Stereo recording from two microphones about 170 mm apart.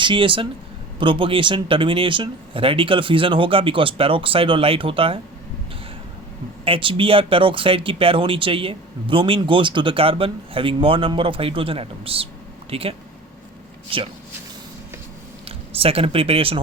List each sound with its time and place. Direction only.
0.0 s speech: 30° right (ahead or behind)
6.7 s speech: 30° right (ahead or behind)
13.9 s speech: 30° right (ahead or behind)
15.4 s speech: 35° right (ahead or behind)